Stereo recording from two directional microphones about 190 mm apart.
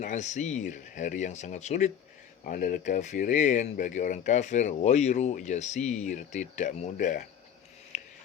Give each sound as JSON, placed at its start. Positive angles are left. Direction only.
{"t": 0.0, "sound": "speech", "side_deg": 40}